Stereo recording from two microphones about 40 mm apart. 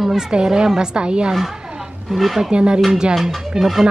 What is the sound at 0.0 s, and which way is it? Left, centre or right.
Speech, centre.